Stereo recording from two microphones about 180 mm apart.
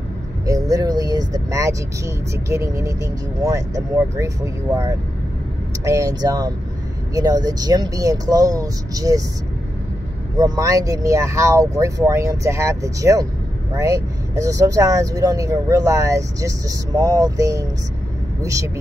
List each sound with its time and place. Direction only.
0.7 s speech: 20° right (ahead or behind)
5.9 s speech: 15° right (ahead or behind)
10.3 s speech: 20° right (ahead or behind)